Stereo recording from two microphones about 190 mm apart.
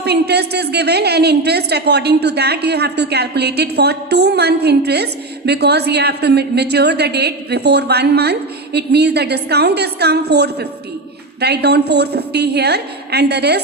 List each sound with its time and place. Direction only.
0.0 s a woman's voice: 60° right (ahead or behind)